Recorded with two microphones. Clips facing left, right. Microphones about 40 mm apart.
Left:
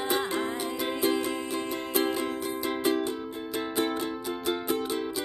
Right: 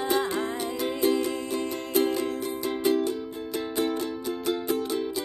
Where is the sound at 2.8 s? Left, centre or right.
Left.